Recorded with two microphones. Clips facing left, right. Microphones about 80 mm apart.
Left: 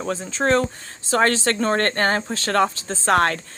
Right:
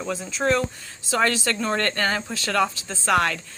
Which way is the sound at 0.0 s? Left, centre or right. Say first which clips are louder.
Left 2 dB; left.